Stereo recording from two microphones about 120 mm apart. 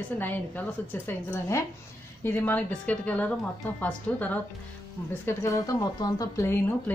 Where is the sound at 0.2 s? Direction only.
15° left (ahead or behind).